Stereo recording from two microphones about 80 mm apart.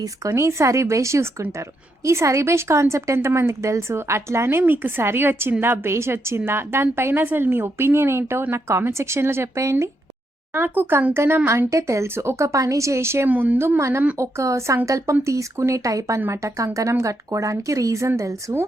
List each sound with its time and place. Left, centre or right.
0.0 s speech: right
10.5 s speech: right
13.2 s speech: right
13.6 s speech: right